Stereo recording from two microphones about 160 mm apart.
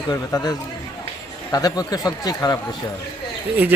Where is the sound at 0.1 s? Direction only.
20° left (ahead or behind).